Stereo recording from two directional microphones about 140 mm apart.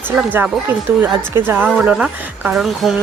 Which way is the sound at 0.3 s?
15° right (ahead or behind).